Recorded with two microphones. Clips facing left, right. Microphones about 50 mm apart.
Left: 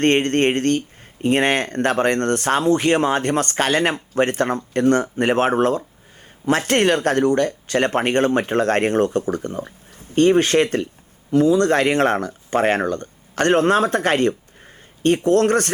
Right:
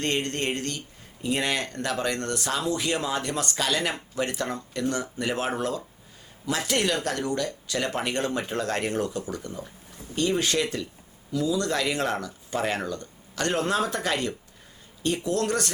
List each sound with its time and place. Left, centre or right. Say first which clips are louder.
0.0 s speech: left 11 dB; left